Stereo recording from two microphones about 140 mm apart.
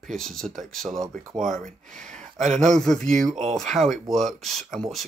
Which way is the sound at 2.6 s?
5° left (ahead or behind).